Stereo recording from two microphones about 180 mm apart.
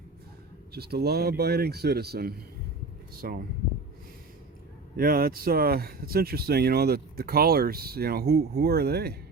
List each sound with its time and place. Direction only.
0.7 s speech: 60° right (ahead or behind)
4.9 s speech: 55° right (ahead or behind)